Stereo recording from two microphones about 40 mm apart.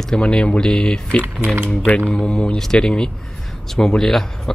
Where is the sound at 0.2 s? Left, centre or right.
Left.